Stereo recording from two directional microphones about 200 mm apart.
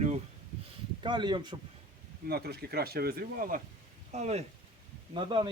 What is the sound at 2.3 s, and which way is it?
A man's voice, 50° right (ahead or behind).